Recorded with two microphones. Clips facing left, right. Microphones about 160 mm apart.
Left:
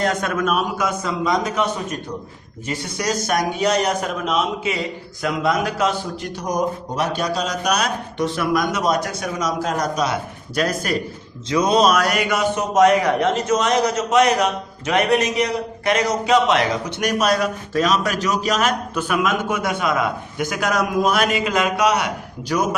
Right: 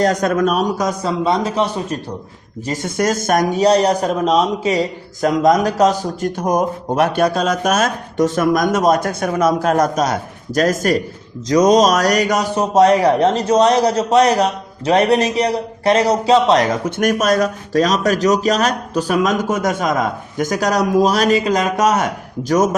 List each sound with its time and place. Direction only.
0.0 s speech: 35° right (ahead or behind)
2.6 s a man's voice: 50° right (ahead or behind); by 16.6 s 35° right (ahead or behind)
16.7 s speech: 50° right (ahead or behind)